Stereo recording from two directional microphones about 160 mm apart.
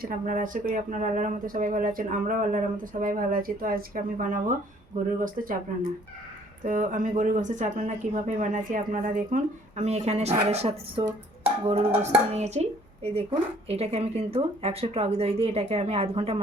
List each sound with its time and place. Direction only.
0.0 s speech: 60° right (ahead or behind)
6.7 s a woman's voice: 55° right (ahead or behind); by 16.4 s 40° right (ahead or behind)